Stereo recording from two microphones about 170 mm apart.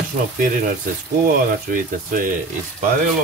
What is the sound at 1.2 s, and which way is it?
Speech, 55° right (ahead or behind).